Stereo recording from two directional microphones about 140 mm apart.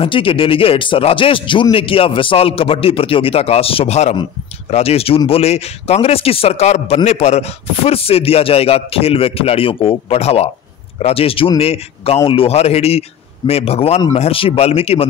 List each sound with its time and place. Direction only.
0.0 s speech: 40° left (ahead or behind)